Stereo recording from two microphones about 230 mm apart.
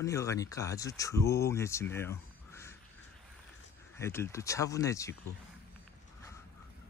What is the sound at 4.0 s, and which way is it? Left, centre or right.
Speech, centre.